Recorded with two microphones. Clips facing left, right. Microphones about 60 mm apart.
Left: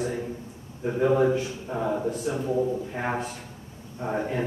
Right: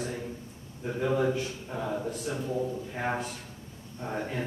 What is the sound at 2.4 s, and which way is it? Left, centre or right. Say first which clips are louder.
A man's voice: left 7 dB; centre.